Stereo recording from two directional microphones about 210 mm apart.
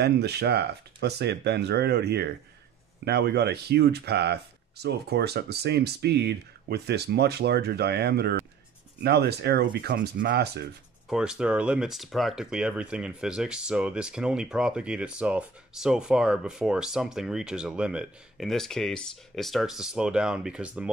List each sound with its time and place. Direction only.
0.0 s speech: 50° right (ahead or behind)
11.1 s speech: 5° right (ahead or behind)